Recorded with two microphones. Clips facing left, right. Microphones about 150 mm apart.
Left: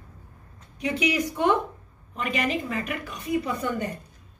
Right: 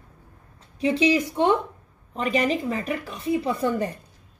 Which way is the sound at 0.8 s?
30° right (ahead or behind).